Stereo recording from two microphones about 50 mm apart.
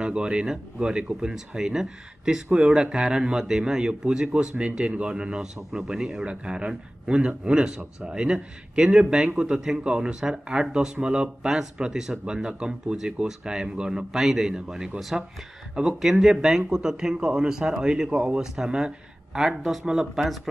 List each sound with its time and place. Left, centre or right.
0.0 s speech: centre